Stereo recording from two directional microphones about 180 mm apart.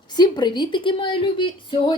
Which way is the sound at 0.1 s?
25° left (ahead or behind).